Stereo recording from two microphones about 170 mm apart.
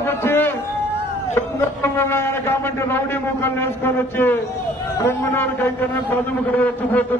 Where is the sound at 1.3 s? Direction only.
15° left (ahead or behind).